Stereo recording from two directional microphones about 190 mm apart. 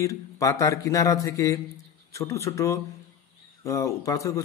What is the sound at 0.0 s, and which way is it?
A man's voice, 15° left (ahead or behind).